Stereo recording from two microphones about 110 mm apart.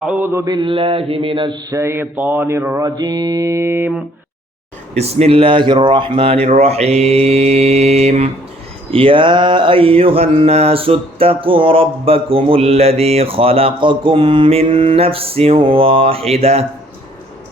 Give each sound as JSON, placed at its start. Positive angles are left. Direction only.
{"t": 0.2, "sound": "music", "side_deg": -25}
{"t": 0.5, "sound": "mantra", "side_deg": -50}
{"t": 1.7, "sound": "music", "side_deg": -25}
{"t": 4.9, "sound": "speech", "side_deg": -70}
{"t": 8.9, "sound": "a sound", "side_deg": -55}